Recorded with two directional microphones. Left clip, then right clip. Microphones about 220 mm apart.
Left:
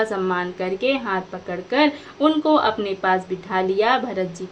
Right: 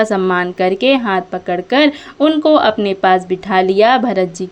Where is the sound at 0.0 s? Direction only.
35° right (ahead or behind).